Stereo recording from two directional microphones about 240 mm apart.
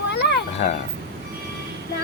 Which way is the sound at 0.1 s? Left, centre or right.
Left.